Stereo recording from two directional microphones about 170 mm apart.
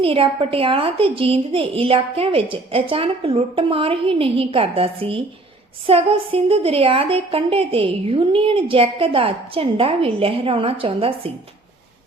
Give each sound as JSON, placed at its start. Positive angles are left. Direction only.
{"t": 0.0, "sound": "a woman's voice", "side_deg": -30}